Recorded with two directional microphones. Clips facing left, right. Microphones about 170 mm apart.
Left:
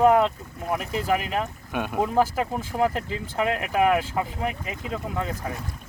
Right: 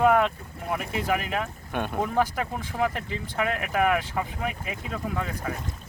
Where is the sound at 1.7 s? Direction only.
5° left (ahead or behind).